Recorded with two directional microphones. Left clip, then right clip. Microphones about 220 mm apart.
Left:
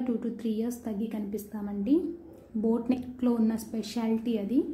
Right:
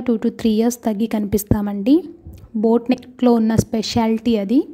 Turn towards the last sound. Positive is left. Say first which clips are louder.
# right 11 dB
turn(degrees=-45)  # may be behind; listen again after turning